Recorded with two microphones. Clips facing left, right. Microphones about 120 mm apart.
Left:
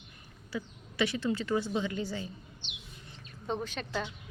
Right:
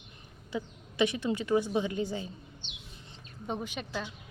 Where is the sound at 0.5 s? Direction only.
20° right (ahead or behind).